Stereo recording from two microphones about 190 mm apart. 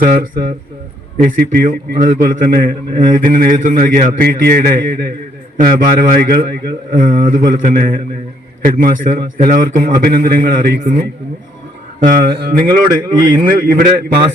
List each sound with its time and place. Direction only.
0.0 s a man's voice: 45° right (ahead or behind)
11.9 s a man's voice: 50° right (ahead or behind)
12.6 s speech: 20° right (ahead or behind)
13.4 s a man's voice: 45° right (ahead or behind)